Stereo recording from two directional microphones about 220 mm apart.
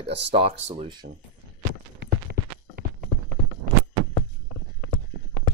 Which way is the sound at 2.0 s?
45° right (ahead or behind).